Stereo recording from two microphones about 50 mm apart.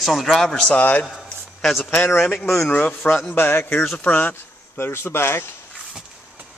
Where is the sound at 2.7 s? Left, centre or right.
Left.